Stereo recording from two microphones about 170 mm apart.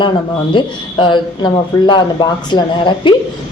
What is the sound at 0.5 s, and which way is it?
Speech, 30° left (ahead or behind).